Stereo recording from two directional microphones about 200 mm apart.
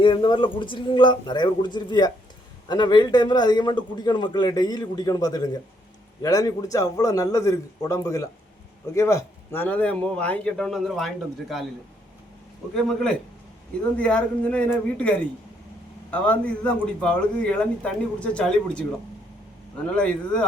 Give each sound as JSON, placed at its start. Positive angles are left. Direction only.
{"t": 0.0, "sound": "a man's voice", "side_deg": 25}
{"t": 12.7, "sound": "a man's voice", "side_deg": 0}